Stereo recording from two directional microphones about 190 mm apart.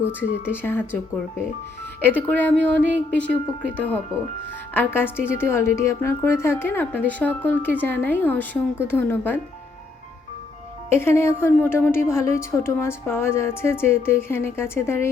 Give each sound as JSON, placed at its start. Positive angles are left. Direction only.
{"t": 0.1, "sound": "a woman's voice", "side_deg": 10}
{"t": 2.0, "sound": "a woman's voice", "side_deg": 10}
{"t": 2.7, "sound": "a sound", "side_deg": -65}
{"t": 3.8, "sound": "a woman's voice", "side_deg": 10}
{"t": 10.9, "sound": "a woman's voice", "side_deg": 15}